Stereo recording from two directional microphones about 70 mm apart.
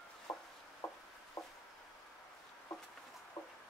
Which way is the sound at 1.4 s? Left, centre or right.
Left.